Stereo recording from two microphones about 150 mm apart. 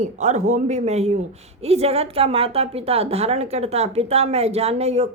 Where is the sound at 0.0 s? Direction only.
50° right (ahead or behind).